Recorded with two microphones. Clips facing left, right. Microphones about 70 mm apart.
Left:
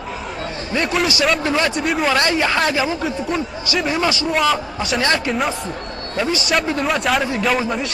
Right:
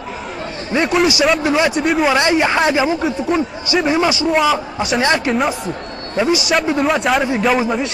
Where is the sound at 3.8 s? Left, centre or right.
Right.